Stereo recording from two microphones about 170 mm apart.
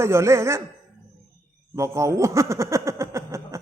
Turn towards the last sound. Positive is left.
turn(degrees=-15)  # may be behind; listen again after turning